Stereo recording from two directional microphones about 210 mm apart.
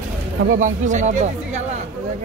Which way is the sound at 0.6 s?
35° right (ahead or behind).